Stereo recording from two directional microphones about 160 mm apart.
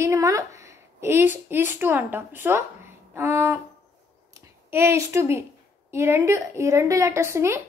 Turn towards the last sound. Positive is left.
turn(degrees=-15)  # may be behind; listen again after turning